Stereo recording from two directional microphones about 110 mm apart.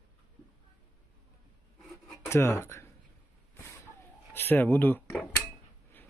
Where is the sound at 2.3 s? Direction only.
25° left (ahead or behind).